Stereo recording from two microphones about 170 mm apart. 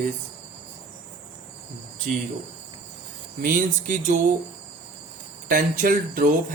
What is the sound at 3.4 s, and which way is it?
Speech, 50° right (ahead or behind).